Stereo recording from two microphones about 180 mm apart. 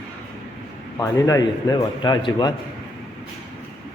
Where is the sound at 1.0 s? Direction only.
20° left (ahead or behind).